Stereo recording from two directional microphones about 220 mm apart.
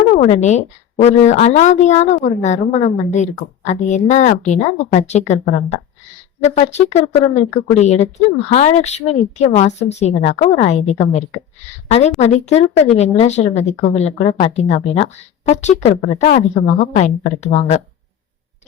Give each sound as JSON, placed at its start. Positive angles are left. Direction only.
{"t": 0.2, "sound": "a woman's voice", "side_deg": 30}